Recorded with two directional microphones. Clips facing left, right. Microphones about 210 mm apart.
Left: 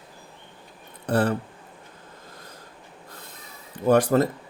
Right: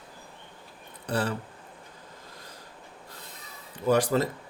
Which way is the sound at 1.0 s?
55° left (ahead or behind).